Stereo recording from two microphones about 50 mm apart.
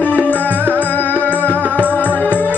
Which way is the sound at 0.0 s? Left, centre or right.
Left.